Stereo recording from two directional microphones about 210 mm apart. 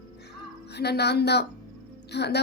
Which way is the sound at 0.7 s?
50° left (ahead or behind).